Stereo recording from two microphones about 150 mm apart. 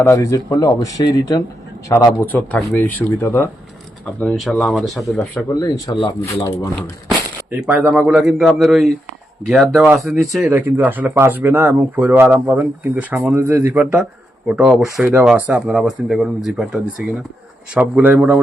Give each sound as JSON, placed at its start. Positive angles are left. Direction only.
{"t": 0.0, "sound": "speech", "side_deg": 20}
{"t": 2.2, "sound": "speech", "side_deg": 10}
{"t": 4.0, "sound": "speech", "side_deg": 5}
{"t": 5.5, "sound": "speech", "side_deg": 25}
{"t": 7.5, "sound": "speech", "side_deg": -10}